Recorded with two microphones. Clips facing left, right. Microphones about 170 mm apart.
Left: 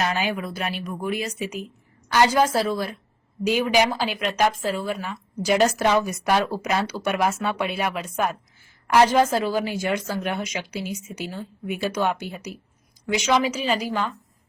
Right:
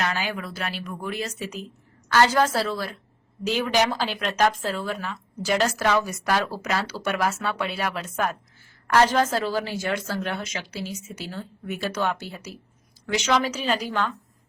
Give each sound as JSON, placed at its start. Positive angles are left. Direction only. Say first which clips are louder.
{"t": 0.0, "sound": "speech", "louder": "left 3 dB", "side_deg": 20}